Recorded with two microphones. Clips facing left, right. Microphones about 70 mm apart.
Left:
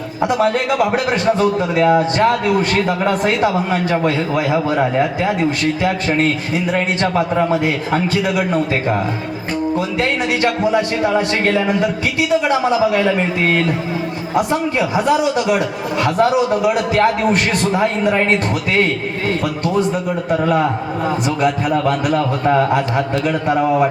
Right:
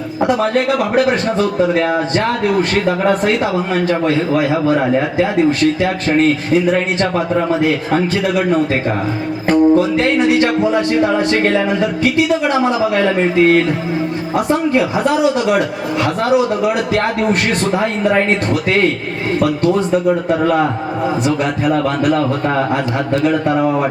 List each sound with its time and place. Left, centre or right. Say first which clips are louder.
1.7 s speech: left 2 dB; right
9.5 s speech: right 9 dB; right
12.3 s speech: even; right
21.4 s a man's voice: even; right